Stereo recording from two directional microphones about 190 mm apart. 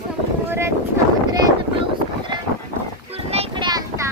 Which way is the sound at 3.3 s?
30° right (ahead or behind).